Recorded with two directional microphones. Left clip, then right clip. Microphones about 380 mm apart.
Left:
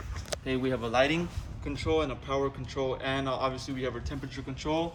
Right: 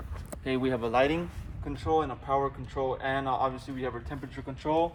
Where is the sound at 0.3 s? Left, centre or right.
Centre.